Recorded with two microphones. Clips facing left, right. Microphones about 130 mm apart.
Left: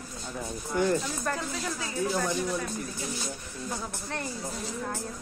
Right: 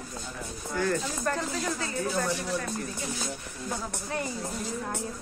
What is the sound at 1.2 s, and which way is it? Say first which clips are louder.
Speech: right 2 dB; 5° left (ahead or behind).